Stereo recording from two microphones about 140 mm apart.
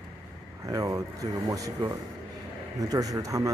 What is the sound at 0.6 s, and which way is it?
Speech, 25° right (ahead or behind).